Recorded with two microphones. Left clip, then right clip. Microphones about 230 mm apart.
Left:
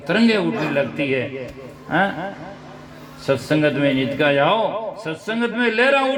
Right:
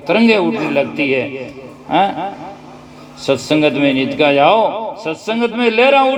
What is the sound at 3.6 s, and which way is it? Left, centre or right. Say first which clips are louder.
A man's voice: right 5 dB; right.